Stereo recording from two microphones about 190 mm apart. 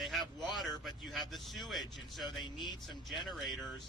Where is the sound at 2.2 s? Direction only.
25° left (ahead or behind).